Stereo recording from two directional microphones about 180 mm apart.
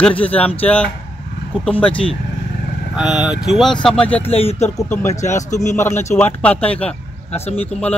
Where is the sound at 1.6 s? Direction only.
5° left (ahead or behind).